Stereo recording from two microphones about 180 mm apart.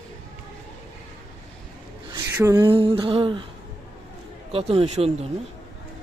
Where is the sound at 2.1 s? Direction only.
15° right (ahead or behind).